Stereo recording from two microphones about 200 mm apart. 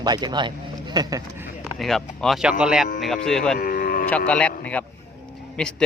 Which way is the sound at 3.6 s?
45° left (ahead or behind).